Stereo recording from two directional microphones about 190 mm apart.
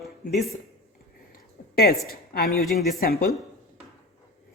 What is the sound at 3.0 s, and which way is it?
Speech, 50° left (ahead or behind).